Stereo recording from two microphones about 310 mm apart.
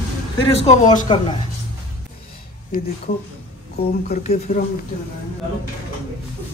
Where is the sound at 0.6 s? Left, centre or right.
Left.